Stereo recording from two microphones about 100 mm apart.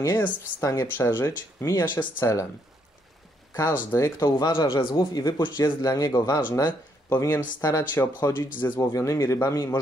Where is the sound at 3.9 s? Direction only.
35° left (ahead or behind).